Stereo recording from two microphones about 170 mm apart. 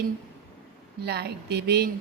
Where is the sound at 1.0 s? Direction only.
70° right (ahead or behind).